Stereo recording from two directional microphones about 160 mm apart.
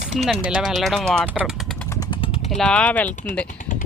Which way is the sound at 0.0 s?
45° right (ahead or behind).